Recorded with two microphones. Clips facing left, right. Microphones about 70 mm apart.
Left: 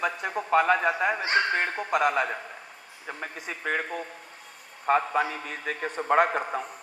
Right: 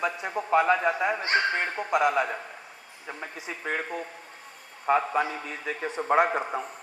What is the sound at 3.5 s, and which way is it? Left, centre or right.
Speech, left.